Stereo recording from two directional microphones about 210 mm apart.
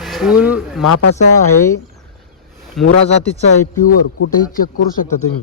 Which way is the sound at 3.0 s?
30° left (ahead or behind).